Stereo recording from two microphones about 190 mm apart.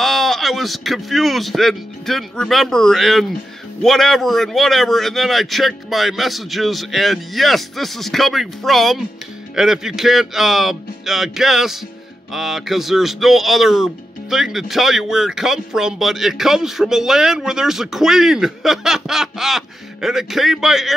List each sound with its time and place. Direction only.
0.0 s speech: centre (ahead or behind)